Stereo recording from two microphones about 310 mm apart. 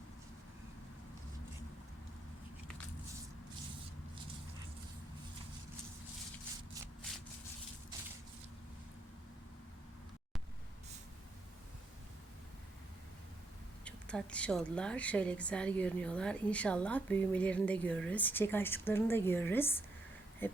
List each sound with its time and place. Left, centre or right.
13.8 s speech: centre